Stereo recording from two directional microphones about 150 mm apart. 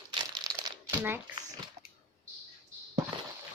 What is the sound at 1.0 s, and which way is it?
Speech, 15° right (ahead or behind).